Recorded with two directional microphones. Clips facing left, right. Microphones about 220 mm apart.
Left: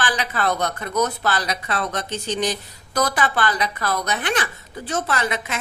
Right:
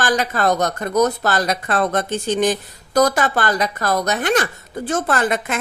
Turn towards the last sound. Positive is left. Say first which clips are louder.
# right 5 dB
turn(degrees=-50)  # may be behind; listen again after turning